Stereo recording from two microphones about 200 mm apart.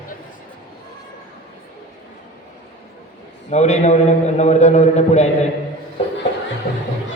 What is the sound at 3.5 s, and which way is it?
A man's voice, 35° left (ahead or behind).